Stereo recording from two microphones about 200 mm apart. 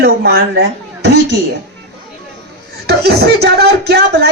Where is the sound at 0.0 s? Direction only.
55° right (ahead or behind).